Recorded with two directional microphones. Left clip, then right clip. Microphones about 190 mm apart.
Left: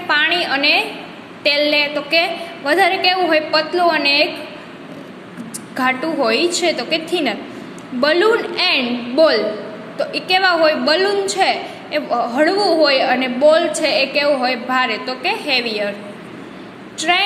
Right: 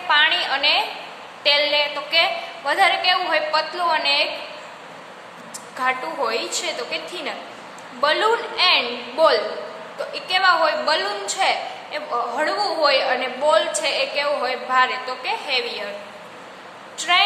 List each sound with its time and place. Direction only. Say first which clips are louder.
0.1 s a woman's voice: left 2 dB; 20° left (ahead or behind)
5.8 s a woman's voice: left 5 dB; 25° left (ahead or behind)
17.0 s a woman's voice: left 3 dB; 20° left (ahead or behind)